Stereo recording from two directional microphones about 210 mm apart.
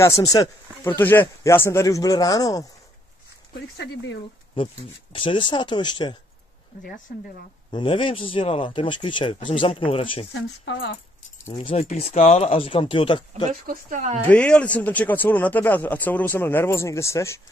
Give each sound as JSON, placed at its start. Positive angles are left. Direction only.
{"t": 0.0, "sound": "speech", "side_deg": 15}
{"t": 3.7, "sound": "speech", "side_deg": 55}
{"t": 5.1, "sound": "speech", "side_deg": 25}
{"t": 7.7, "sound": "speech", "side_deg": 25}
{"t": 10.3, "sound": "speech", "side_deg": 60}
{"t": 11.6, "sound": "speech", "side_deg": 30}
{"t": 13.5, "sound": "speech", "side_deg": -40}
{"t": 14.3, "sound": "speech", "side_deg": 5}